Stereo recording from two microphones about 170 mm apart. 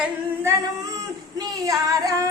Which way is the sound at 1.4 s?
20° right (ahead or behind).